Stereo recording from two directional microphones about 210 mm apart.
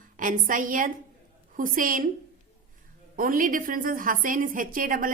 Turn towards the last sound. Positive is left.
turn(degrees=-40)  # may be behind; listen again after turning